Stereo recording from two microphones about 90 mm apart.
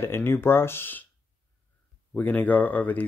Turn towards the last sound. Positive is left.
turn(degrees=20)  # may be behind; listen again after turning